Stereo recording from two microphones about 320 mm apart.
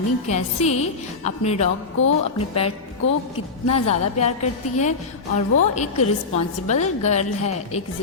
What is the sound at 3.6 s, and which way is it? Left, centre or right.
A woman's voice, centre.